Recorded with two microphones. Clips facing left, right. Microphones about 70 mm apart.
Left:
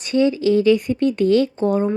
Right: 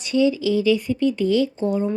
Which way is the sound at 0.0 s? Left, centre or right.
Left.